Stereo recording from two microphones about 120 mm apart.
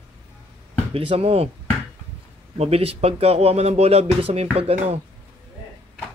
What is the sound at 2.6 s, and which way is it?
Speech, 55° right (ahead or behind).